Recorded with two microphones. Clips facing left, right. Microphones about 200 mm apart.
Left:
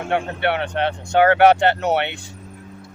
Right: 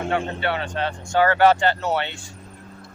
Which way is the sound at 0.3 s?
65° left (ahead or behind).